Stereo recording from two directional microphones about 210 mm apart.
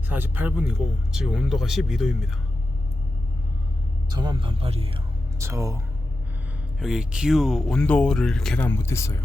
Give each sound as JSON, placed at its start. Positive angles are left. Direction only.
{"t": 0.1, "sound": "speech", "side_deg": -10}
{"t": 4.1, "sound": "speech", "side_deg": -20}
{"t": 5.4, "sound": "speech", "side_deg": -15}
{"t": 6.7, "sound": "speech", "side_deg": -5}